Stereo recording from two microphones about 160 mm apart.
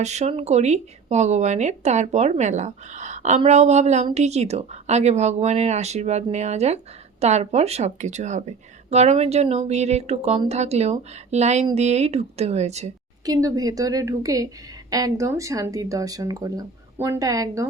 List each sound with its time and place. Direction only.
0.0 s speech: 45° right (ahead or behind)
13.2 s speech: 25° right (ahead or behind)